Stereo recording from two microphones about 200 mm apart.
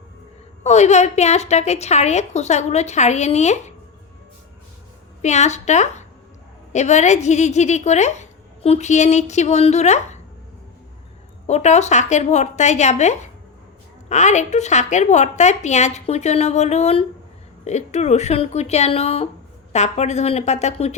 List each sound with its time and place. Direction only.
0.6 s a woman's voice: 35° left (ahead or behind)
5.2 s a woman's voice: 35° left (ahead or behind)
11.4 s a woman's voice: 35° left (ahead or behind)